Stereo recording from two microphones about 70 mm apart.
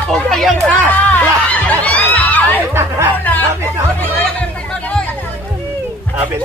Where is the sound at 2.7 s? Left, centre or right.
Right.